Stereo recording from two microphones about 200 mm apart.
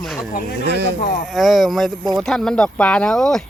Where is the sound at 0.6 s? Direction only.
55° right (ahead or behind).